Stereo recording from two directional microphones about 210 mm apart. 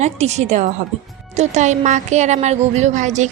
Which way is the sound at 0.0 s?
30° right (ahead or behind).